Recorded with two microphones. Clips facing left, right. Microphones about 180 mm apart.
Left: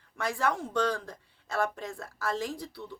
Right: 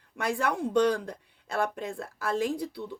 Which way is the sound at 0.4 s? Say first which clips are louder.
Right 4 dB; 15° right (ahead or behind).